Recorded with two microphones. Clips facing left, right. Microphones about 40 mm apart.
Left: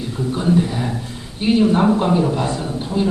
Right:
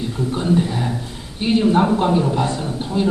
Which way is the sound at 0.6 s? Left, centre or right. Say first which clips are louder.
Even; centre.